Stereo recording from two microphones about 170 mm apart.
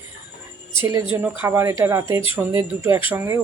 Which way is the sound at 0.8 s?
15° right (ahead or behind).